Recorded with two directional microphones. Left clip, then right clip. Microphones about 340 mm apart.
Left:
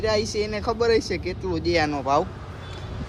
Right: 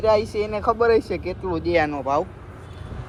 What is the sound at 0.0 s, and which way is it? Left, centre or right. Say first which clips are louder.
Speech: right 4 dB; centre.